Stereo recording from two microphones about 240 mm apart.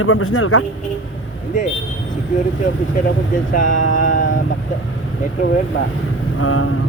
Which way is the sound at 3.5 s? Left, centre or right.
Left.